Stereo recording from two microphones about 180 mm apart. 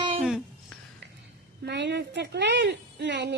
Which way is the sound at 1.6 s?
70° right (ahead or behind).